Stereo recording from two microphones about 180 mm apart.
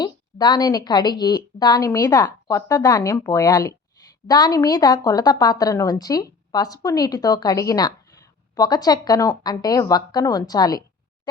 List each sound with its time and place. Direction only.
0.0 s a woman's voice: 25° left (ahead or behind)
4.0 s a sound: 20° left (ahead or behind)
4.3 s a woman's voice: 20° left (ahead or behind)